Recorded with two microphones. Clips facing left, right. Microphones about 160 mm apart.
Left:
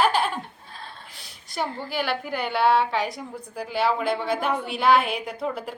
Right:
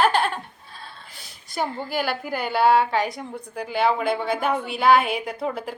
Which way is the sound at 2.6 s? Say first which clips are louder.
Right 3 dB; 5° right (ahead or behind).